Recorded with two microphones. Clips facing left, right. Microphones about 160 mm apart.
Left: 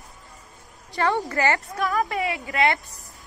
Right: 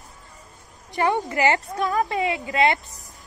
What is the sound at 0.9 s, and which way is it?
A woman's voice, 20° right (ahead or behind).